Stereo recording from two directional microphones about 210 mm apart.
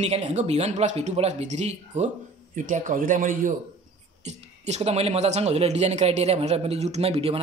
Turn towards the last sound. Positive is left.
turn(degrees=-30)  # may be behind; listen again after turning